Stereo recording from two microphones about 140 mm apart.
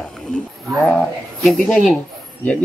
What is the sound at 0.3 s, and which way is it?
Speech, centre (ahead or behind).